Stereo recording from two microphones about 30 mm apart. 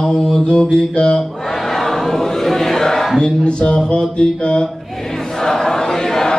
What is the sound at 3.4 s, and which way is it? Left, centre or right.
Mantra, left.